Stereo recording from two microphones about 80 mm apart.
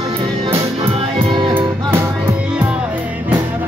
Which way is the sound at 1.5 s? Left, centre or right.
Right.